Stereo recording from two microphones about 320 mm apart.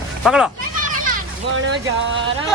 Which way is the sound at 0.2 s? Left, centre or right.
Centre.